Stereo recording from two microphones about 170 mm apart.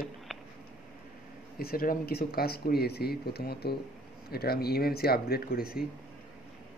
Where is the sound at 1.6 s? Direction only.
60° left (ahead or behind).